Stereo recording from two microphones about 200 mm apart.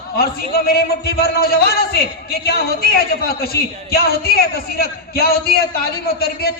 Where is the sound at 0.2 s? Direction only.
50° left (ahead or behind).